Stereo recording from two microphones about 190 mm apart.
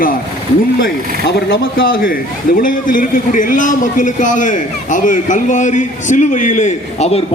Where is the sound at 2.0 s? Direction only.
45° left (ahead or behind).